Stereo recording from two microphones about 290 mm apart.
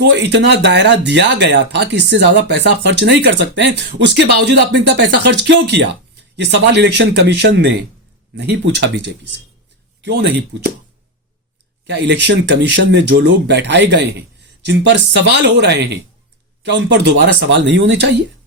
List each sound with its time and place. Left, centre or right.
0.0 s speech: right
11.9 s speech: right